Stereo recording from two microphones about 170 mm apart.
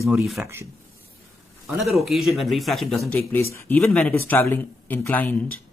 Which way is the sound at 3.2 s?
15° left (ahead or behind).